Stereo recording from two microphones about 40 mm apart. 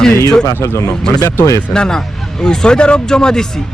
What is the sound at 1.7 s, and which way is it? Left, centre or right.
A man's voice, centre.